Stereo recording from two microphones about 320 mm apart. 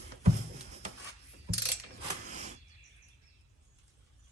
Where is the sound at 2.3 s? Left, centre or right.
Right.